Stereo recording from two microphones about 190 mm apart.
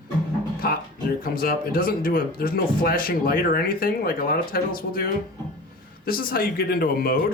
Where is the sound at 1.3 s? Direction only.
50° left (ahead or behind).